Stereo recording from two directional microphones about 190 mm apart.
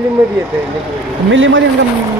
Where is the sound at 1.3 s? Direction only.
85° right.